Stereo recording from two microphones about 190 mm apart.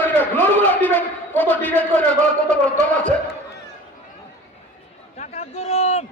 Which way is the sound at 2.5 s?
5° left (ahead or behind).